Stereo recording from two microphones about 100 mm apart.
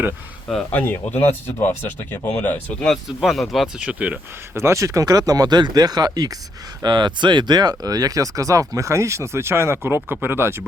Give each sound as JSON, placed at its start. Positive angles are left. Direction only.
{"t": 0.7, "sound": "speech", "side_deg": 15}
{"t": 2.8, "sound": "speech", "side_deg": 0}
{"t": 3.8, "sound": "speech", "side_deg": -15}
{"t": 4.5, "sound": "speech", "side_deg": -30}